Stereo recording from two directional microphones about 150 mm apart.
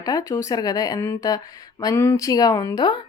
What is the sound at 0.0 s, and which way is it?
Speech, 25° left (ahead or behind).